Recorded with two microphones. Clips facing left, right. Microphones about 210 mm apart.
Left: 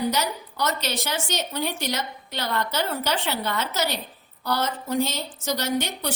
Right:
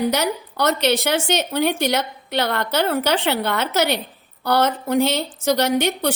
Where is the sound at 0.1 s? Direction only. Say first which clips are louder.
Right 5 dB; 65° right (ahead or behind).